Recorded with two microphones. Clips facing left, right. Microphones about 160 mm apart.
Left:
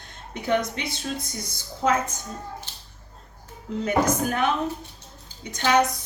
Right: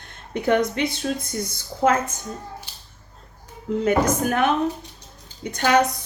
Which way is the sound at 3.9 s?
55° right (ahead or behind).